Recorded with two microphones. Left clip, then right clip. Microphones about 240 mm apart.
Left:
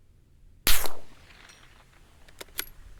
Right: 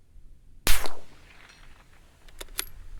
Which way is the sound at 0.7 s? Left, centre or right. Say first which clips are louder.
Left 2 dB; left.